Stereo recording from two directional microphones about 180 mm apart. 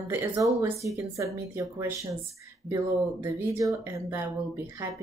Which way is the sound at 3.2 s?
15° right (ahead or behind).